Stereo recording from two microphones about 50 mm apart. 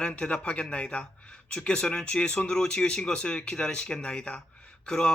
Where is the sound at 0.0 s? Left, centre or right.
Centre.